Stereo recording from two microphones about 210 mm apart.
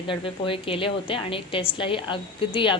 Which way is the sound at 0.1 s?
25° left (ahead or behind).